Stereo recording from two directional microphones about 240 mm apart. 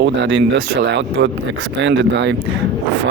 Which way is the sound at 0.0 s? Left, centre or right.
Right.